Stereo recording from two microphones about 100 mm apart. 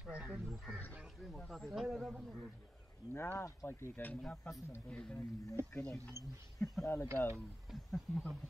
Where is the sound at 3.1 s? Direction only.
25° left (ahead or behind).